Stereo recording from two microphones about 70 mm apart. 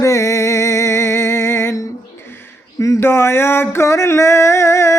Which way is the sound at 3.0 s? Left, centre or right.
Left.